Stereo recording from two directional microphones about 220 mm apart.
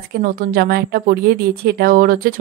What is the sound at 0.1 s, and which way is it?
Speech, 40° right (ahead or behind).